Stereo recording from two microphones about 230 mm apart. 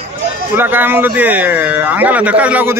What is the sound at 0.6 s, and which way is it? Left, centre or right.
A man's voice, centre.